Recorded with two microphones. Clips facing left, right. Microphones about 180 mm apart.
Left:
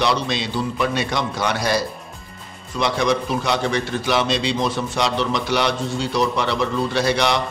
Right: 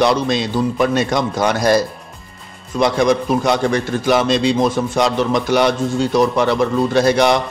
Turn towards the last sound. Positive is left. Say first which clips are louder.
# right 6 dB
turn(degrees=-50)  # may be behind; listen again after turning